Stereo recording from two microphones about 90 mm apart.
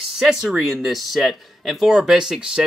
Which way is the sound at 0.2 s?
5° right (ahead or behind).